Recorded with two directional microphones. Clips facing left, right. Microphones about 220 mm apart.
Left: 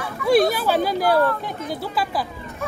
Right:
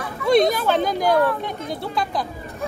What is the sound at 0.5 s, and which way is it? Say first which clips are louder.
Speech: even; 5° left (ahead or behind).